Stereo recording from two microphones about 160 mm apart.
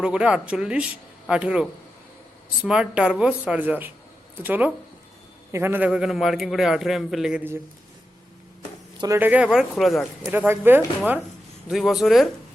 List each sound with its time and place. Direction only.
0.0 s a man's voice: 5° right (ahead or behind)
9.0 s a man's voice: 15° right (ahead or behind); by 10.3 s centre (ahead or behind)
10.3 s speech: 10° right (ahead or behind)
11.7 s a man's voice: centre (ahead or behind)